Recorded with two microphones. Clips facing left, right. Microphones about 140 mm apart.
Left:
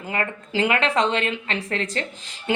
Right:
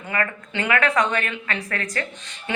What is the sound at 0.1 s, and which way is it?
Speech, 30° left (ahead or behind).